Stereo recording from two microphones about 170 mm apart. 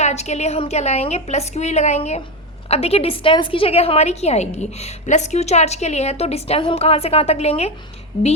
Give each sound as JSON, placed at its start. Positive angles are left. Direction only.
{"t": 0.0, "sound": "a woman's voice", "side_deg": 40}